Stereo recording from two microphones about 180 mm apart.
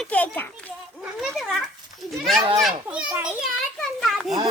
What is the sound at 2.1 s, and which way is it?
Speech, centre (ahead or behind).